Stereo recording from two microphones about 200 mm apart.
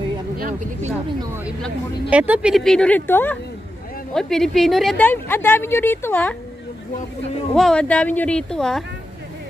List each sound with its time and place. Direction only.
0.4 s speech: 45° right (ahead or behind)
1.2 s a woman's voice: 10° right (ahead or behind); by 6.3 s 10° left (ahead or behind)
7.5 s speech: 5° left (ahead or behind)